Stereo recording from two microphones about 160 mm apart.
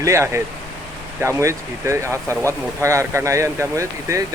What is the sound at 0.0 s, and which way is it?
Speech, 15° right (ahead or behind).